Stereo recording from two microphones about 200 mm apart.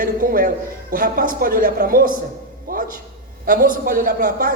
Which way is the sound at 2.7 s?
45° right (ahead or behind).